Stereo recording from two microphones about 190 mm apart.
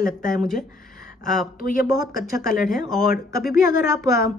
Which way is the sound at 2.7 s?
Centre (ahead or behind).